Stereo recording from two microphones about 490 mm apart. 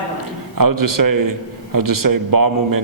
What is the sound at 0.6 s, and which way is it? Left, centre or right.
A man's voice, right.